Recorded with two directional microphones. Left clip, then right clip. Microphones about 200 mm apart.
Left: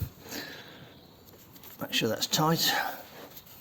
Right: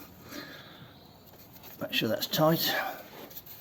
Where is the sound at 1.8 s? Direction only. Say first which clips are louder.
Left 1 dB; 25° left (ahead or behind).